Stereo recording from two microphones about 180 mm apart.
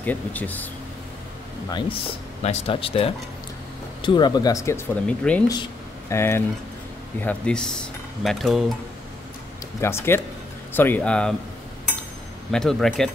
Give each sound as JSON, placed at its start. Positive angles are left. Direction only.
{"t": 0.0, "sound": "speech", "side_deg": 10}
{"t": 1.7, "sound": "speech", "side_deg": 25}
{"t": 5.0, "sound": "speech", "side_deg": 5}
{"t": 5.5, "sound": "speech", "side_deg": 20}
{"t": 9.8, "sound": "speech", "side_deg": 15}
{"t": 12.4, "sound": "speech", "side_deg": 0}